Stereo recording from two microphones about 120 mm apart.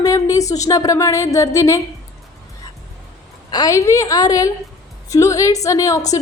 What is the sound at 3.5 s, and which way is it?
A woman's voice, 30° left (ahead or behind).